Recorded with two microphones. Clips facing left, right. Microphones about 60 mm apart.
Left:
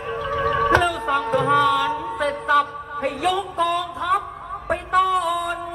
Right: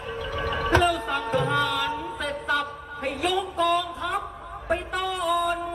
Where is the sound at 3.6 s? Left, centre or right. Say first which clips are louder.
Left 2 dB; centre.